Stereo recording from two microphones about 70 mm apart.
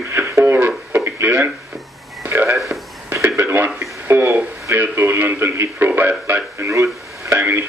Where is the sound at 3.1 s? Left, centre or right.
Right.